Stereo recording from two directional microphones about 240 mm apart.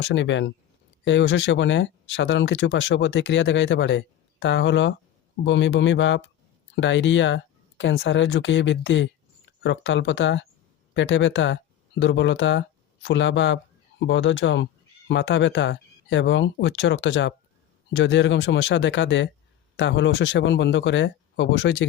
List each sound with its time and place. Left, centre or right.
0.0 s speech: left